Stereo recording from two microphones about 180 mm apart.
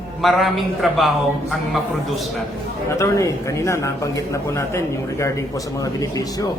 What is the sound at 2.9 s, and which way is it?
A man's voice, 15° left (ahead or behind).